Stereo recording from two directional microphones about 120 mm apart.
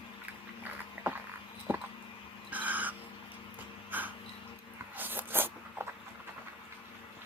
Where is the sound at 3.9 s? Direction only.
15° right (ahead or behind).